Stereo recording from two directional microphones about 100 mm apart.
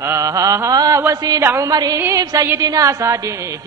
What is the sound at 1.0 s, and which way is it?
Speech, 30° right (ahead or behind).